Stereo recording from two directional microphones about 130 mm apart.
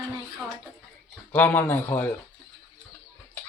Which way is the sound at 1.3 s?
15° left (ahead or behind).